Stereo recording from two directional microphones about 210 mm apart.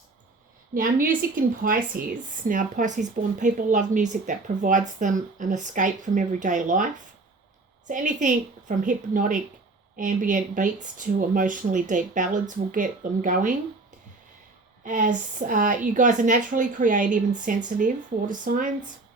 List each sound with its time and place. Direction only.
0.7 s a woman's voice: 40° right (ahead or behind)
14.8 s a woman's voice: 40° right (ahead or behind)